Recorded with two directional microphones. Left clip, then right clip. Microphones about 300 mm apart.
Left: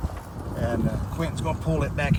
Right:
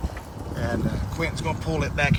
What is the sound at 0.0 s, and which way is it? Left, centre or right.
Speech, centre.